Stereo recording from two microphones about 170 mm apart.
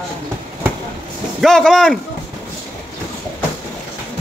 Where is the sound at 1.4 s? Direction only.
5° left (ahead or behind).